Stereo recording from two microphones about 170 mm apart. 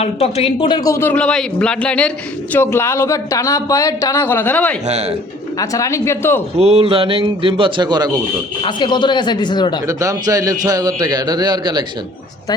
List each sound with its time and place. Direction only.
0.0 s speech: 35° left (ahead or behind)
0.9 s a man's voice: 15° left (ahead or behind)
4.9 s a man's voice: 40° right (ahead or behind)
5.5 s a man's voice: 20° left (ahead or behind)
6.6 s a man's voice: 35° right (ahead or behind)
8.6 s speech: 25° left (ahead or behind)
9.8 s a man's voice: 20° right (ahead or behind)